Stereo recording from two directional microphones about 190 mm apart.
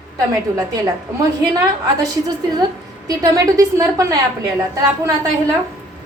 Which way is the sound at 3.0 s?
20° right (ahead or behind).